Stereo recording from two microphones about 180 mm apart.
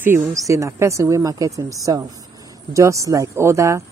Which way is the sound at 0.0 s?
15° right (ahead or behind).